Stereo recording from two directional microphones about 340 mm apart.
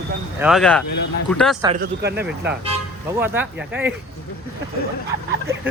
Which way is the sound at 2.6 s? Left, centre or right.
Centre.